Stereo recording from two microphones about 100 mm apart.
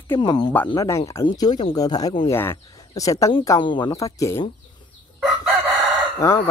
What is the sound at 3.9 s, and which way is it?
Speech, 30° left (ahead or behind).